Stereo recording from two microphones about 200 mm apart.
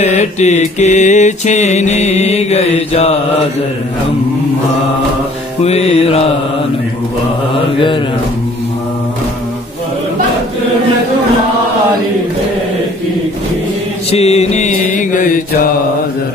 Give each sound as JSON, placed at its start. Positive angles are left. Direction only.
{"t": 0.0, "sound": "mantra", "side_deg": 35}
{"t": 5.6, "sound": "mantra", "side_deg": 30}
{"t": 14.1, "sound": "mantra", "side_deg": 30}